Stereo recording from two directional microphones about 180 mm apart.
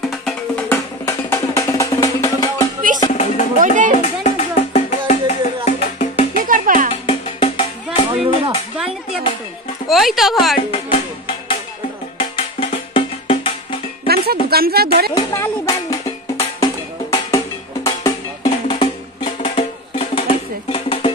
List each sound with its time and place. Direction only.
0.1 s music: centre (ahead or behind)
0.7 s music: 15° left (ahead or behind)
3.1 s music: 40° left (ahead or behind)
3.5 s music: 45° right (ahead or behind)
4.0 s music: 40° left (ahead or behind)
6.4 s music: 50° right (ahead or behind)
6.9 s music: 35° left (ahead or behind)
8.5 s a sound: 5° right (ahead or behind)
9.8 s speech: centre (ahead or behind)
10.7 s music: 30° left (ahead or behind)
14.0 s music: 60° right (ahead or behind)
15.1 s speech: 15° left (ahead or behind)
16.5 s music: 20° left (ahead or behind)